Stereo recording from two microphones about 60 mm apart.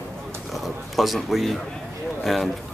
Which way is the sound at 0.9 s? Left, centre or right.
Centre.